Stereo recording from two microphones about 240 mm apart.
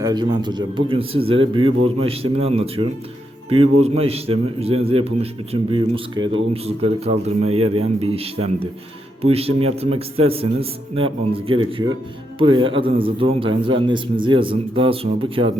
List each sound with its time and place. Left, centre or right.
0.0 s a man's voice: centre